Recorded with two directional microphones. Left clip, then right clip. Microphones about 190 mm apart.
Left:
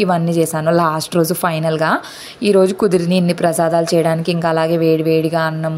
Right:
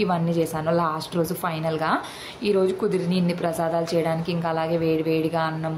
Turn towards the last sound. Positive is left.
turn(degrees=35)  # may be behind; listen again after turning